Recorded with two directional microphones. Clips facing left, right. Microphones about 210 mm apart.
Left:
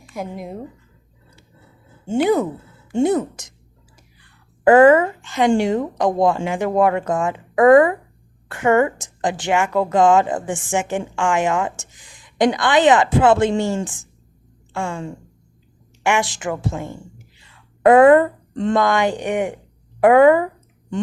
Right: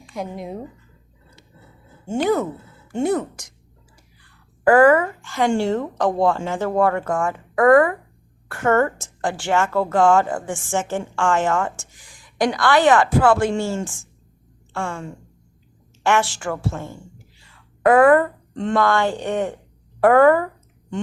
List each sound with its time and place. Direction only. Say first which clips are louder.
0.1 s speech: even; centre (ahead or behind)
2.0 s a woman's voice: left 3 dB; 15° left (ahead or behind)
4.6 s a woman's voice: left 3 dB; 25° left (ahead or behind)
16.0 s a woman's voice: even; 15° left (ahead or behind)